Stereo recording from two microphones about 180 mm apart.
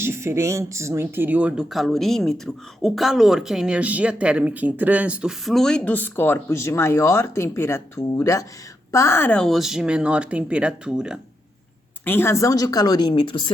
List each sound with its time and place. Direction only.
0.0 s speech: 15° right (ahead or behind)
12.0 s speech: 15° left (ahead or behind); by 13.5 s 30° left (ahead or behind)